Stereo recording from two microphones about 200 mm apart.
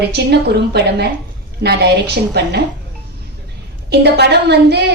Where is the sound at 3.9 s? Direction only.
55° right (ahead or behind).